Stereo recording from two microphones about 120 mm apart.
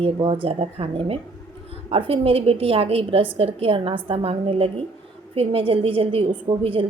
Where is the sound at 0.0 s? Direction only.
45° right (ahead or behind).